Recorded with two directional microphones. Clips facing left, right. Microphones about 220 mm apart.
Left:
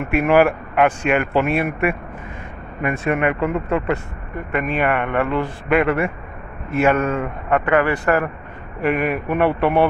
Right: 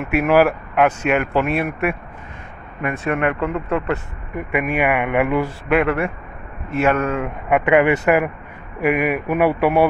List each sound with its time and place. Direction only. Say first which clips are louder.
0.0 s a man's voice: even; centre (ahead or behind)
4.6 s a man's voice: right 1 dB; 10° right (ahead or behind)
5.7 s a man's voice: left 1 dB; centre (ahead or behind)
7.4 s a man's voice: right 3 dB; 15° right (ahead or behind)